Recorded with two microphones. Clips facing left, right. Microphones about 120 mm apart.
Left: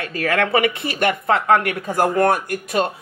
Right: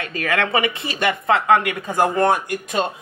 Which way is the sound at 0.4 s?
20° right (ahead or behind).